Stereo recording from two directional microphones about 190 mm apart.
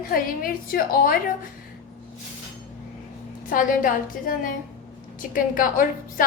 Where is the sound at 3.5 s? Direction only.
45° left (ahead or behind).